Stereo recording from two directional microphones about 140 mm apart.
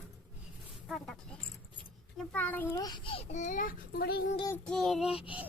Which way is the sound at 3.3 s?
65° left (ahead or behind).